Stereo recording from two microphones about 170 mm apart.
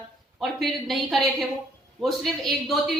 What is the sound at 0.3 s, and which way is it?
A woman's voice, centre (ahead or behind).